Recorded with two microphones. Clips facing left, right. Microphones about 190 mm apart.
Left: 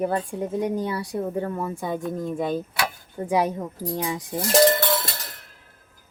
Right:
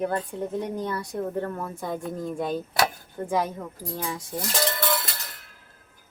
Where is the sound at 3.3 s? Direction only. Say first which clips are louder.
Left 4 dB; 15° left (ahead or behind).